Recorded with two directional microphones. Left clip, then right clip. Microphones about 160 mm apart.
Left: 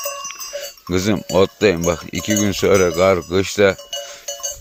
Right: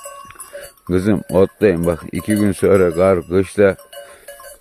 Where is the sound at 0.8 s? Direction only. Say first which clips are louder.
Right 2 dB; 50° right (ahead or behind).